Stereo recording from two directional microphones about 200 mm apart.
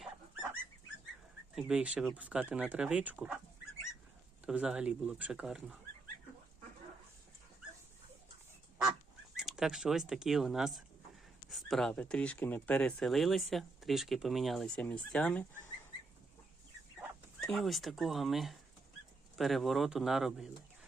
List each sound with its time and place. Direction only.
1.5 s speech: 5° right (ahead or behind)
4.4 s speech: 5° right (ahead or behind)
9.3 s speech: centre (ahead or behind)
17.4 s speech: centre (ahead or behind)